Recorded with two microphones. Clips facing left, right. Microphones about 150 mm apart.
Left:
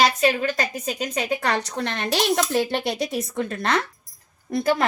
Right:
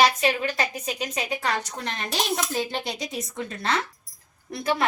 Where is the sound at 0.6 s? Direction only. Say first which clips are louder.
Left 2 dB; 40° left (ahead or behind).